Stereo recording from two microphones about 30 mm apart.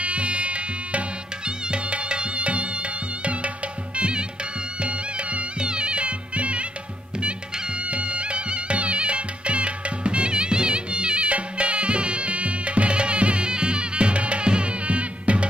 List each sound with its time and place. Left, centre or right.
0.0 s music: right
4.8 s music: right
5.6 s music: right
11.2 s music: right
13.5 s music: right